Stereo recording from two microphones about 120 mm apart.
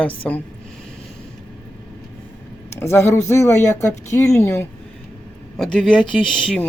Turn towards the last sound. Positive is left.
turn(degrees=5)  # may be behind; listen again after turning